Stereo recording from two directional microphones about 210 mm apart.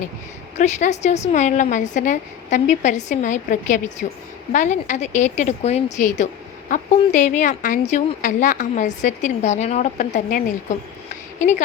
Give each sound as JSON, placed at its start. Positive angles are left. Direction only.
{"t": 0.5, "sound": "a woman's voice", "side_deg": 35}